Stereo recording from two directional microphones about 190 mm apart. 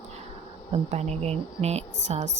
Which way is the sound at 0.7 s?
35° right (ahead or behind).